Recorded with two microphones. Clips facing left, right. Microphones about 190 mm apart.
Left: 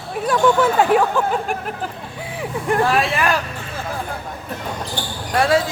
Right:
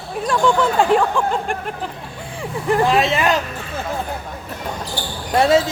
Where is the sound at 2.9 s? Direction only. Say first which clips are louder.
Right 2 dB; 20° right (ahead or behind).